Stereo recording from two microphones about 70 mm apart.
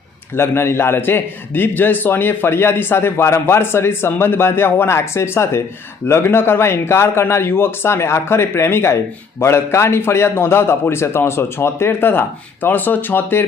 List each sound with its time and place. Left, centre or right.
0.3 s a man's voice: left